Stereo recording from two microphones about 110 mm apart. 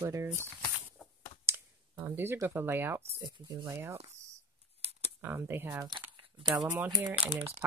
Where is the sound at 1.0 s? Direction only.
5° right (ahead or behind).